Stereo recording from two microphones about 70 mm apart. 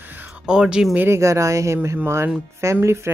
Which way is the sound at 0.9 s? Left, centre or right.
Right.